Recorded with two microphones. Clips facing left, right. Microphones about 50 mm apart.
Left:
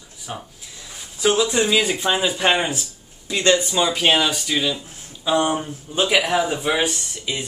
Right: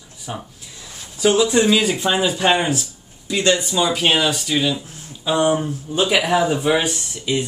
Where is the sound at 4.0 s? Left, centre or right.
Centre.